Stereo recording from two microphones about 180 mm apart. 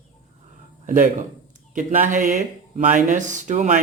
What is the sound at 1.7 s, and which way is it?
A man's voice, 45° right (ahead or behind).